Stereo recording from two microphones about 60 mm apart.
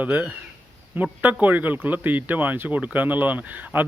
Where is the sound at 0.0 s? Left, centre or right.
Right.